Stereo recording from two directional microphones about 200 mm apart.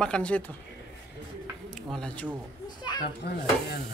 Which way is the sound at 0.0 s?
5° left (ahead or behind).